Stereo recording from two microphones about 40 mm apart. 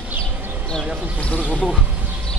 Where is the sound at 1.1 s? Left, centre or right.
Left.